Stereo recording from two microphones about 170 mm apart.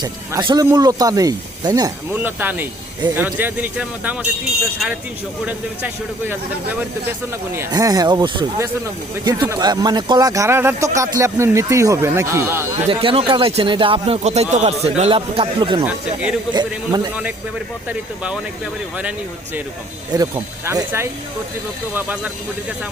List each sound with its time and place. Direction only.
0.0 s speech: 25° right (ahead or behind)
2.1 s speech: 10° right (ahead or behind)
5.5 s speech: 10° right (ahead or behind)
12.9 s speech: 30° right (ahead or behind)
17.8 s speech: 5° right (ahead or behind)
20.1 s speech: 20° right (ahead or behind)